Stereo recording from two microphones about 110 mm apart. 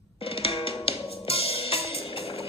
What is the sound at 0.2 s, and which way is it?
Music, 60° left (ahead or behind).